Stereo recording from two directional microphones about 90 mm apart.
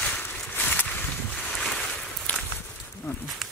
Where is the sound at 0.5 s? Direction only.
20° left (ahead or behind).